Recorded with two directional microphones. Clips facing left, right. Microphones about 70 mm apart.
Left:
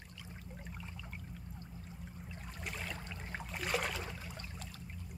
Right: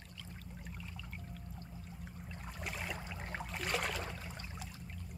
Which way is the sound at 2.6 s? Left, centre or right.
Centre.